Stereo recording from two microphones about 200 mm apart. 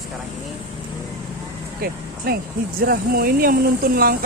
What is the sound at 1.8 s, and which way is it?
Speech, 50° right (ahead or behind).